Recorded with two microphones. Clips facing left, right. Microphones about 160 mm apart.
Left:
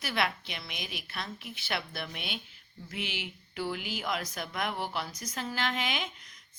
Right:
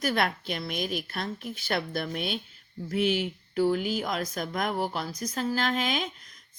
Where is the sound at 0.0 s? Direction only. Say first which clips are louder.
Right 5 dB; 45° right (ahead or behind).